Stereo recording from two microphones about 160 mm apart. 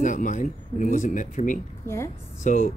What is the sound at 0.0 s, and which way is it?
Speech, 50° left (ahead or behind).